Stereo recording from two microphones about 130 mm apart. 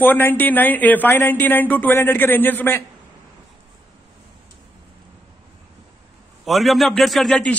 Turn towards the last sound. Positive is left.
turn(degrees=5)  # may be behind; listen again after turning